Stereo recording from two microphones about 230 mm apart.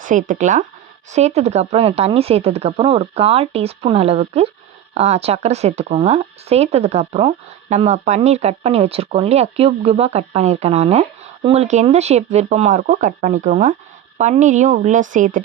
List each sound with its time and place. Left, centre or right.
0.0 s a woman's voice: right